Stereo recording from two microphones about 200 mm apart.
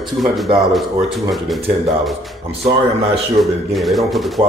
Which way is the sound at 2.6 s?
30° right (ahead or behind).